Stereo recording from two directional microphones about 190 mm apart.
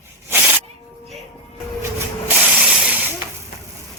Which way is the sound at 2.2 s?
5° right (ahead or behind).